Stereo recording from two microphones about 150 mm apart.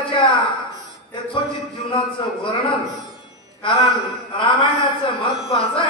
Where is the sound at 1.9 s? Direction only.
35° left (ahead or behind).